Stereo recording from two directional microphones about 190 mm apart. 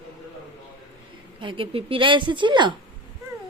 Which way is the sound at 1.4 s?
25° right (ahead or behind).